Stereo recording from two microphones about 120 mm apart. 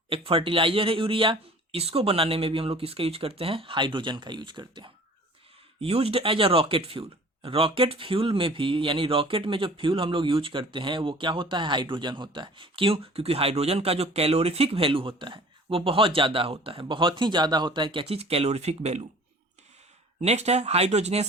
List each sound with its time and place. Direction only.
0.1 s speech: 50° right (ahead or behind)
5.8 s speech: 55° right (ahead or behind)
20.2 s speech: 65° right (ahead or behind)